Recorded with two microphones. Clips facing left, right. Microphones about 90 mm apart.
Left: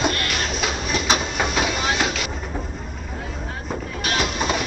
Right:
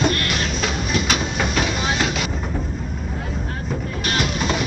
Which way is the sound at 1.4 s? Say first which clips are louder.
Even; 10° left (ahead or behind).